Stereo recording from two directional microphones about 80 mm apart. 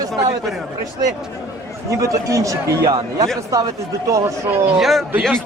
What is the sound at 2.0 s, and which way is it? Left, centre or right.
Speech, right.